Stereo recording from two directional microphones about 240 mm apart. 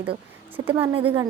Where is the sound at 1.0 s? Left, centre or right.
Centre.